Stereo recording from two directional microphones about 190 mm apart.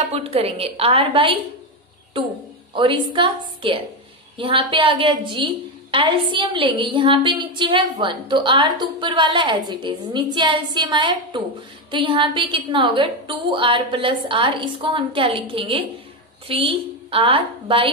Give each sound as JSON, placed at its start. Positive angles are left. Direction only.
{"t": 0.1, "sound": "a woman's voice", "side_deg": -30}
{"t": 2.7, "sound": "a woman's voice", "side_deg": -25}